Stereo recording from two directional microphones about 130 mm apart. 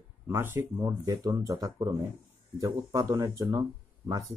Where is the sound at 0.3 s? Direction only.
15° right (ahead or behind).